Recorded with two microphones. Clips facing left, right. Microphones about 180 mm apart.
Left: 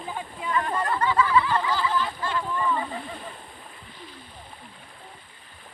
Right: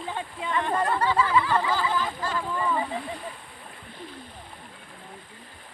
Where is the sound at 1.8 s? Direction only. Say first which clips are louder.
Left 1 dB; 45° right (ahead or behind).